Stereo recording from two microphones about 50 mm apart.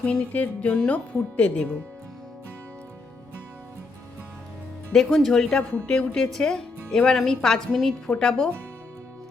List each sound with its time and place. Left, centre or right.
0.0 s speech: left
4.9 s a woman's voice: centre
5.8 s a woman's voice: centre
7.7 s a woman's voice: centre
8.1 s a woman's voice: centre